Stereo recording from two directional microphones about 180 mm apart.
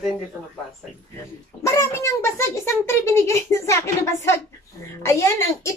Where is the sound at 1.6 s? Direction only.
15° left (ahead or behind).